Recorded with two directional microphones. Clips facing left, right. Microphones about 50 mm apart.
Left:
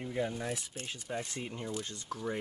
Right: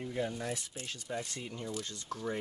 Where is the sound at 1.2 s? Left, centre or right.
Left.